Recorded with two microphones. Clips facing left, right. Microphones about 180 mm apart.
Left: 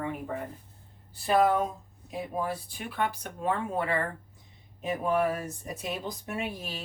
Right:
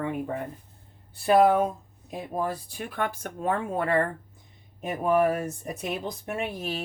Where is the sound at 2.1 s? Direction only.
40° right (ahead or behind).